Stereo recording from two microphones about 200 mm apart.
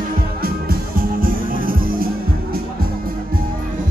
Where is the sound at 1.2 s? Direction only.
45° right (ahead or behind).